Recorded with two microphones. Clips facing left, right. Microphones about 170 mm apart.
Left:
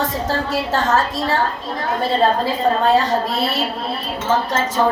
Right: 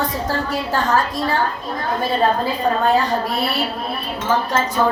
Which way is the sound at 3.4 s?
25° left (ahead or behind).